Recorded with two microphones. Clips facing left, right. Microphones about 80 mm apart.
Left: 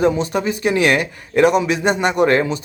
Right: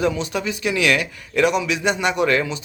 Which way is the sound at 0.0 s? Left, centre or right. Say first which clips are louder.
Left 5 dB; left.